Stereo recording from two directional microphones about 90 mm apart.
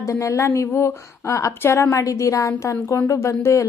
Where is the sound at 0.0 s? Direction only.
35° left (ahead or behind).